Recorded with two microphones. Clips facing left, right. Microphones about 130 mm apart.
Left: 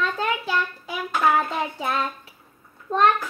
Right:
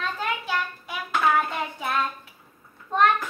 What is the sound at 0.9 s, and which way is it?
Child singing, 35° left (ahead or behind).